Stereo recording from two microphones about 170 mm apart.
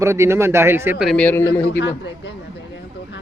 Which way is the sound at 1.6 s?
90° left.